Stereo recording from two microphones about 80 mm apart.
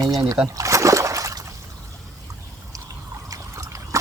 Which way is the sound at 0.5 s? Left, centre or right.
Right.